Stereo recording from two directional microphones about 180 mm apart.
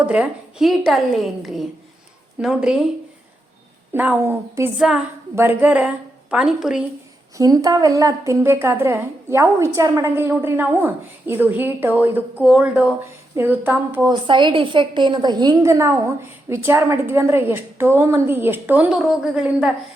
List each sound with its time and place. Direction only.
0.0 s a woman's voice: 5° right (ahead or behind)
3.9 s a woman's voice: 10° right (ahead or behind)
7.3 s a woman's voice: 20° right (ahead or behind)
14.1 s a woman's voice: 25° right (ahead or behind); by 19.7 s 5° right (ahead or behind)